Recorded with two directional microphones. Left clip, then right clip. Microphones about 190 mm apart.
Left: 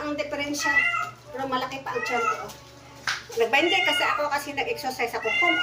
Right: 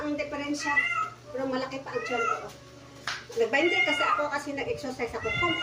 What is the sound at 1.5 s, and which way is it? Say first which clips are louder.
Speech: left 7 dB; 10° right (ahead or behind).